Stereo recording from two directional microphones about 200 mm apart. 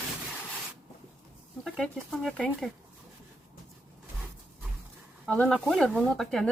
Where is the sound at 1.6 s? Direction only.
Centre (ahead or behind).